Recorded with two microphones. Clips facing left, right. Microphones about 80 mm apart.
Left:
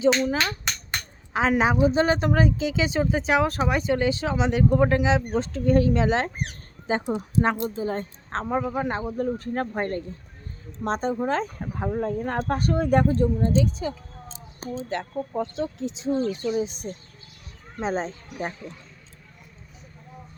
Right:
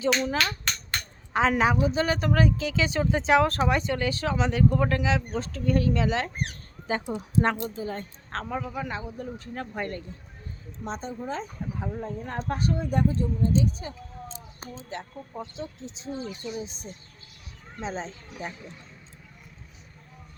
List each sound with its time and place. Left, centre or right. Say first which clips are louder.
0.4 s a sound: left 1 dB; centre
1.3 s a woman's voice: even; centre
1.5 s speech: left 3 dB; left
1.9 s speech: left 4 dB; left
3.1 s speech: right 1 dB; centre
3.9 s speech: left 3 dB; centre
7.3 s speech: left 1 dB; centre
7.6 s speech: left 5 dB; left
10.8 s speech: left 8 dB; left
11.6 s speech: left 6 dB; left
14.8 s speech: left 8 dB; left
17.7 s speech: left 6 dB; left